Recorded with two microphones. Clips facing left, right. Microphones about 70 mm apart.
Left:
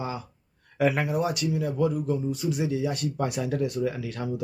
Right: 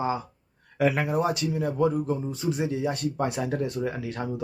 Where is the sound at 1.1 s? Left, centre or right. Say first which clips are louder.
Right 1 dB; right.